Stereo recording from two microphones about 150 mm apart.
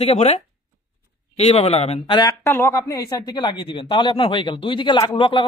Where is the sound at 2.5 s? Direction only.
15° left (ahead or behind); by 5.4 s 35° left (ahead or behind).